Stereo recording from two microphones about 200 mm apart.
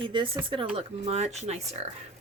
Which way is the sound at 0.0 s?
25° right (ahead or behind).